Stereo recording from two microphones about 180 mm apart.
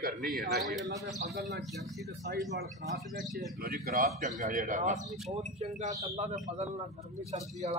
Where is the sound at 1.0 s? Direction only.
65° right (ahead or behind).